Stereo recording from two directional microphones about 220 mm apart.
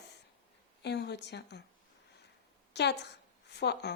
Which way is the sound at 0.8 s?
50° left (ahead or behind).